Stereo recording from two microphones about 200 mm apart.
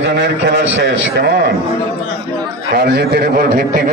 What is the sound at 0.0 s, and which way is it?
A man's voice, 60° right (ahead or behind).